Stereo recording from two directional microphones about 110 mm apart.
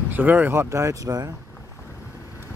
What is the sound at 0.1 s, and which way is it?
Speech, 15° right (ahead or behind).